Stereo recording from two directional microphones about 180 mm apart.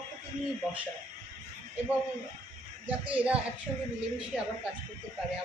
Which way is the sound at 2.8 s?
10° right (ahead or behind).